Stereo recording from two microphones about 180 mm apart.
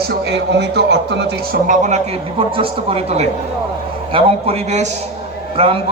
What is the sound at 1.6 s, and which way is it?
A man's voice, 40° right (ahead or behind).